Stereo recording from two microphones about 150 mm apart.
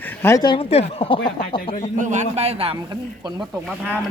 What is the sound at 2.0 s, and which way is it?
Speech, 55° right (ahead or behind).